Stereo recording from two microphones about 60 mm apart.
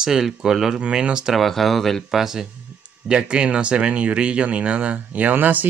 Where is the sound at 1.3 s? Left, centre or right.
Centre.